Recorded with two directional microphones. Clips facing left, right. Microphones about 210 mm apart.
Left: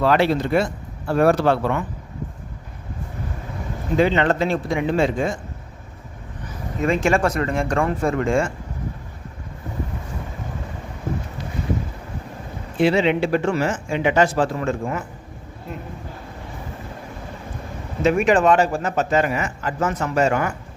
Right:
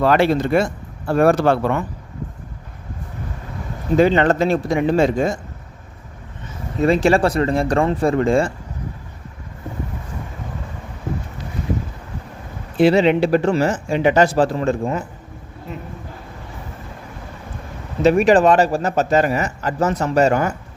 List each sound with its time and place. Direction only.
0.0 s speech: 50° right (ahead or behind)
3.9 s speech: 40° right (ahead or behind)
6.4 s speech: 35° right (ahead or behind)
12.7 s speech: 40° right (ahead or behind)
18.0 s speech: 35° right (ahead or behind)